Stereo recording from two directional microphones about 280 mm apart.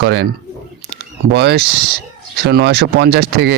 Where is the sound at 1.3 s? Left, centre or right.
Right.